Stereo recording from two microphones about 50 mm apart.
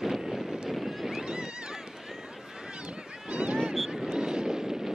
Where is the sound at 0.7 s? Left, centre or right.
Centre.